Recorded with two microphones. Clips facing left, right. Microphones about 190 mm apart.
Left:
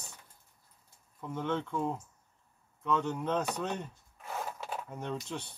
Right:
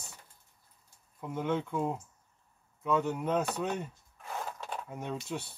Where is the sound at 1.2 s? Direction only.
10° right (ahead or behind).